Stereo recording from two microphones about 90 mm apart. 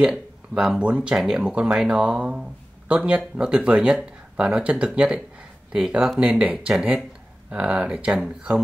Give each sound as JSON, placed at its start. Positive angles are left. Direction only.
{"t": 0.6, "sound": "speech", "side_deg": -5}